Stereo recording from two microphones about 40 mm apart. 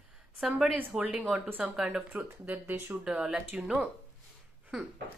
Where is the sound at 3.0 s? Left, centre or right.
Right.